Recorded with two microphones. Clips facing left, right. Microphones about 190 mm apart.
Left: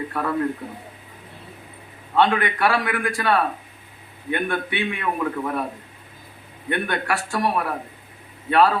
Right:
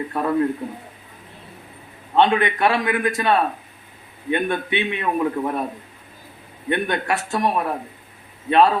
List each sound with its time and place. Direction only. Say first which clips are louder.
0.1 s a man's voice: right 5 dB; 20° right (ahead or behind)
2.1 s a man's voice: right 2 dB; 20° right (ahead or behind)
6.7 s a man's voice: right 2 dB; 20° right (ahead or behind)